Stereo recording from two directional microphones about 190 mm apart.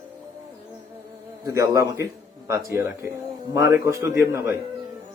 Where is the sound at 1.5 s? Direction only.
15° right (ahead or behind).